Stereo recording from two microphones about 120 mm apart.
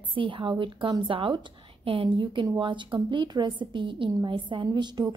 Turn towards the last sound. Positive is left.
turn(degrees=-40)  # may be behind; listen again after turning